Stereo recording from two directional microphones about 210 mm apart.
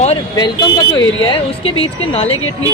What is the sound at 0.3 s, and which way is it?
Speech, 20° left (ahead or behind).